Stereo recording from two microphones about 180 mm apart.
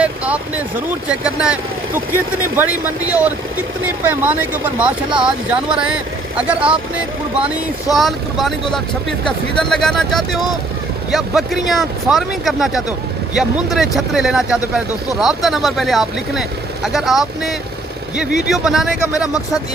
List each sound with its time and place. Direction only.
0.0 s speech: 5° right (ahead or behind)
2.6 s speech: 10° right (ahead or behind)
18.3 s speech: 65° left (ahead or behind)
18.5 s speech: centre (ahead or behind)